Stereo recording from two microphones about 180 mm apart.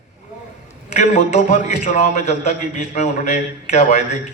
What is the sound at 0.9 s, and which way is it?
A man's voice, 40° left (ahead or behind).